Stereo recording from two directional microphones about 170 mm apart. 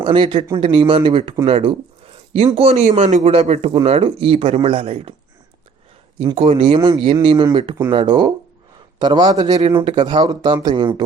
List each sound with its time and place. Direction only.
0.0 s speech: 30° right (ahead or behind)
1.5 s a sound: 35° right (ahead or behind)
2.6 s speech: 40° right (ahead or behind)
6.1 s a man's voice: 35° right (ahead or behind)